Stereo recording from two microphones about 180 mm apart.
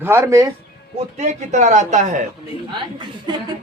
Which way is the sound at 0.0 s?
10° right (ahead or behind).